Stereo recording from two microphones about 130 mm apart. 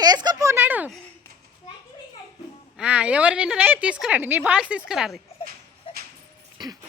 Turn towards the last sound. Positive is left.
turn(degrees=-30)  # may be behind; listen again after turning